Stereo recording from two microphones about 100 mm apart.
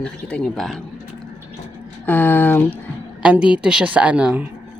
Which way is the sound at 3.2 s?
10° right (ahead or behind).